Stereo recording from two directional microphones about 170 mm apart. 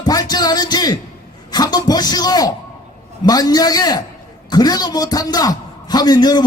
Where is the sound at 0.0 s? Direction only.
25° left (ahead or behind).